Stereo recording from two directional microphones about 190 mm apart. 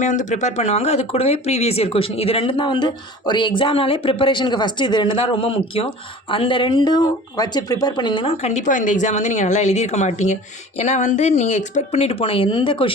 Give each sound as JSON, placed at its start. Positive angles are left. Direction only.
{"t": 0.0, "sound": "speech", "side_deg": 40}